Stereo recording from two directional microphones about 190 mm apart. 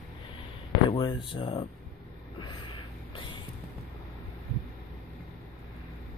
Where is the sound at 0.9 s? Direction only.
25° left (ahead or behind).